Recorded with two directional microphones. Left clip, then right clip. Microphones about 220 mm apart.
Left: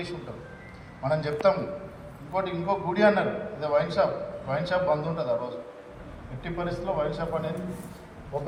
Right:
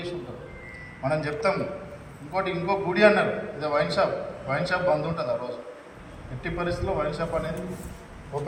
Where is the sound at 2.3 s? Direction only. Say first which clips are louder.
Right 2 dB; 20° left (ahead or behind).